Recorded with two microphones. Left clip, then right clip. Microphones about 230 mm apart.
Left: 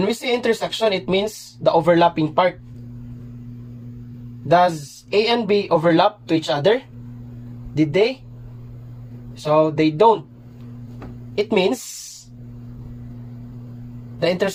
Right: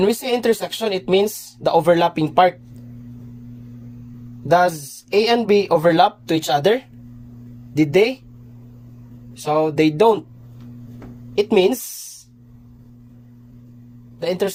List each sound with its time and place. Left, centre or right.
0.0 s speech: right
4.4 s speech: right
7.8 s speech: right
9.4 s speech: right
11.3 s speech: right
14.2 s speech: right